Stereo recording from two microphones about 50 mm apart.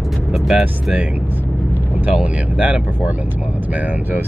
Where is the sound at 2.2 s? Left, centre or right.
Right.